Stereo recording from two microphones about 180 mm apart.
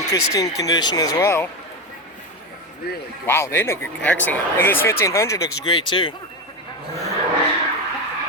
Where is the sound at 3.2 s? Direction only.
15° left (ahead or behind).